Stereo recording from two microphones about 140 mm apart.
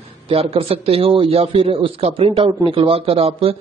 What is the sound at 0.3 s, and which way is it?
A man's voice, 45° right (ahead or behind).